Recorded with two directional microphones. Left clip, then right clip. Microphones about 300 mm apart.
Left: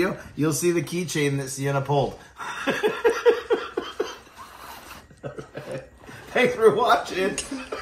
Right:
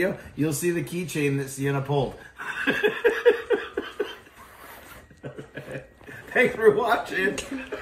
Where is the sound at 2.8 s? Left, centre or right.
Centre.